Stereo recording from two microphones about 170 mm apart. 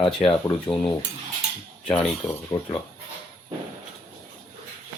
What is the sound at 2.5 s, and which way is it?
Speech, 20° left (ahead or behind).